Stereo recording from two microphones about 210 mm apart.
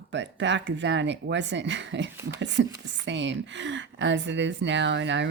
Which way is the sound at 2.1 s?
15° right (ahead or behind).